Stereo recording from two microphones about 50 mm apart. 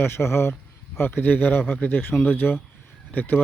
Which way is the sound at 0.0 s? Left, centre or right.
Left.